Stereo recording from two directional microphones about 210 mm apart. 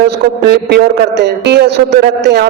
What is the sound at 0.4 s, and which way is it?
A woman's voice, 50° right (ahead or behind).